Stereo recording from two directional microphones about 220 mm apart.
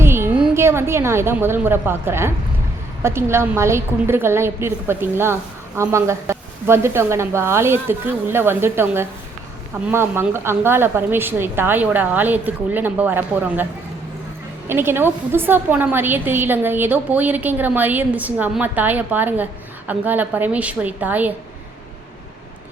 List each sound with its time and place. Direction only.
0.0 s a woman's voice: 10° right (ahead or behind)
14.7 s a woman's voice: 10° right (ahead or behind)